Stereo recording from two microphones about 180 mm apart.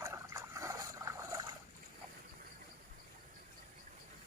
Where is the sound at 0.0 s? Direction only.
15° right (ahead or behind).